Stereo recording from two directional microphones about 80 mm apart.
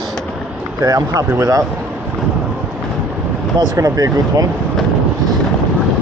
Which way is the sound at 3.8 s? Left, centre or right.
Right.